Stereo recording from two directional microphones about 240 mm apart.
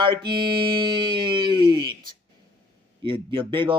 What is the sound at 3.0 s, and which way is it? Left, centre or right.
Speech, right.